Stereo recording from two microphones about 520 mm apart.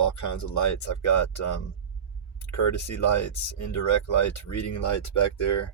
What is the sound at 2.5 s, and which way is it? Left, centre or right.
Speech, left.